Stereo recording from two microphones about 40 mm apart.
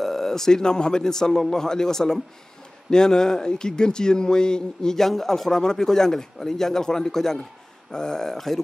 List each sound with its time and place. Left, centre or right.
0.0 s speech: centre